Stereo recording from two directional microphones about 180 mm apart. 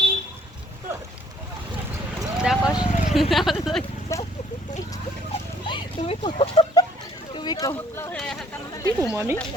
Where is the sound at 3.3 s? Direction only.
Centre (ahead or behind).